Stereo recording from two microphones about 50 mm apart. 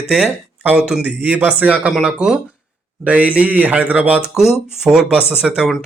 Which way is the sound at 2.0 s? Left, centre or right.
Centre.